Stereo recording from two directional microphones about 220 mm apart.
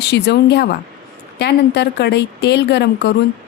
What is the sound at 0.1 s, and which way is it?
Speech, 50° left (ahead or behind).